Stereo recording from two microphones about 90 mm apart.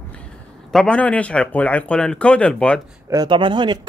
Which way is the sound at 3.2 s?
65° right (ahead or behind).